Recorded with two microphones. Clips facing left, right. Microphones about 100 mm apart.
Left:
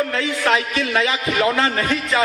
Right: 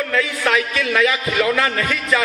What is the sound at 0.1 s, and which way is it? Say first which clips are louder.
A man's voice: even; 30° left (ahead or behind).